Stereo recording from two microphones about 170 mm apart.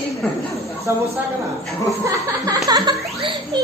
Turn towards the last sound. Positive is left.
turn(degrees=-25)  # may be behind; listen again after turning